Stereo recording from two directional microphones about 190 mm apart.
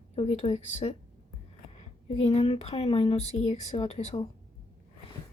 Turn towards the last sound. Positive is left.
turn(degrees=30)  # may be behind; listen again after turning